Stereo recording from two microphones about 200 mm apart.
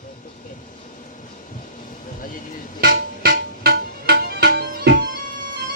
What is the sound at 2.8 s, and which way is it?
Music, 50° right (ahead or behind).